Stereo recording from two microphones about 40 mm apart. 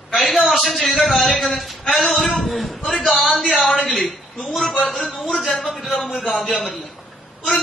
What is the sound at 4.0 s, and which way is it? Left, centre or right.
A woman's voice, centre.